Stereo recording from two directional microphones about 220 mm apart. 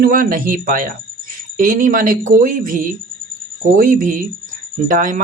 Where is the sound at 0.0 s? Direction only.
40° right (ahead or behind).